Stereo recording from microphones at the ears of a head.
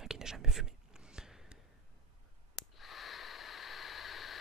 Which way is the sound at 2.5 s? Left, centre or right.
Left.